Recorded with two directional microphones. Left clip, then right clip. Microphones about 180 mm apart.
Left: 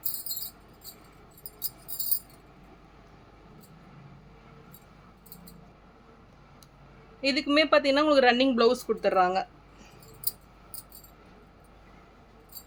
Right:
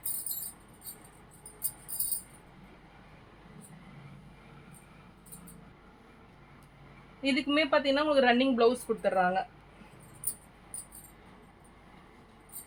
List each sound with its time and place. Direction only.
7.2 s speech: 55° left (ahead or behind); by 9.4 s 70° left (ahead or behind)